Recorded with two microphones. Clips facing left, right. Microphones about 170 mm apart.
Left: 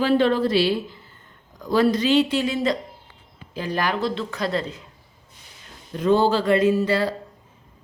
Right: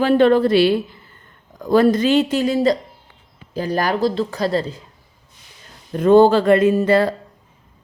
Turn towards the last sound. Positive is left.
turn(degrees=-50)  # may be behind; listen again after turning